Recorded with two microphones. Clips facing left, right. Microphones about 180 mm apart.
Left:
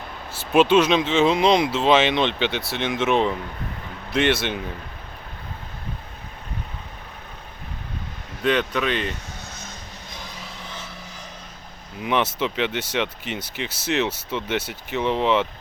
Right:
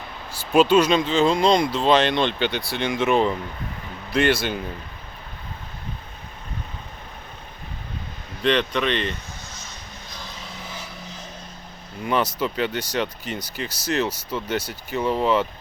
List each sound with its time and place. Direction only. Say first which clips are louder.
0.5 s speech: even; centre (ahead or behind)
8.4 s speech: even; 5° left (ahead or behind)
11.9 s speech: even; 5° left (ahead or behind)
14.1 s speech: even; 25° left (ahead or behind)
14.3 s speech: even; 5° left (ahead or behind)